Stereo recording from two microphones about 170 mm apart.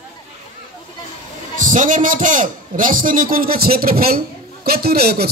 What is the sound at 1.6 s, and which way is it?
A man's voice, 50° right (ahead or behind).